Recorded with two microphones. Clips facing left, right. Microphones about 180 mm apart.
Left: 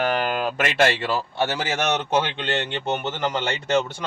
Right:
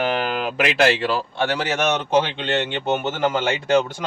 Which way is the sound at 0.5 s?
Centre (ahead or behind).